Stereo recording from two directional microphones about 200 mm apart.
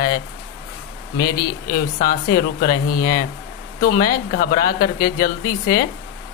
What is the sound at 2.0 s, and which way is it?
Speech, 50° left (ahead or behind).